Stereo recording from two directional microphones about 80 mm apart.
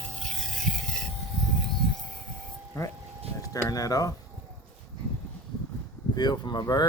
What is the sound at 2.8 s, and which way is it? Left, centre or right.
Vehicle, left.